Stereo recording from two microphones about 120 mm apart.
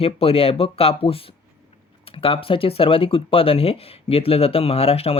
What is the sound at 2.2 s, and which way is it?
Speech, 50° left (ahead or behind).